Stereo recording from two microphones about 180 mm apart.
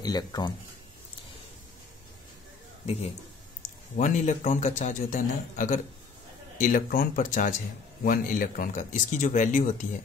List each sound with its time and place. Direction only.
0.0 s speech: 20° left (ahead or behind)
3.9 s speech: 45° left (ahead or behind)